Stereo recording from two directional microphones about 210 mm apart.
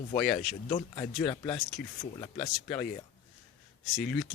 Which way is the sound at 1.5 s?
Centre (ahead or behind).